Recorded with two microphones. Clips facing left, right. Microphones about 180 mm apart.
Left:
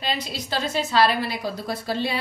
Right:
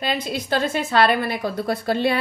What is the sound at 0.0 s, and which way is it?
Speech, 50° right (ahead or behind).